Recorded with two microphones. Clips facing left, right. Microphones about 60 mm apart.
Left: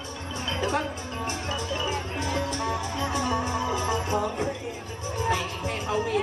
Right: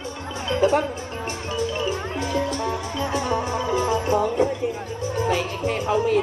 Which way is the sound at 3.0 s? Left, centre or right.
Right.